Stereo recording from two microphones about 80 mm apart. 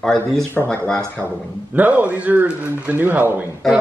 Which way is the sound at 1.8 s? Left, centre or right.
Centre.